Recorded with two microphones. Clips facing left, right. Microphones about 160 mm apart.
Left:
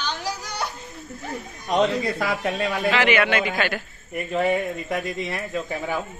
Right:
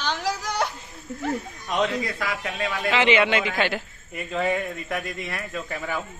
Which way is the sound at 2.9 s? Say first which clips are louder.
Right 2 dB; 25° right (ahead or behind).